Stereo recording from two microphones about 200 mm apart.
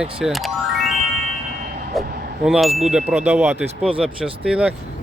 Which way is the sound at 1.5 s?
55° right (ahead or behind).